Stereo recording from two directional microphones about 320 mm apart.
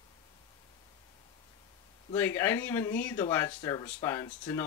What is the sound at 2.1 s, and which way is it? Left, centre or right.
Speech, centre.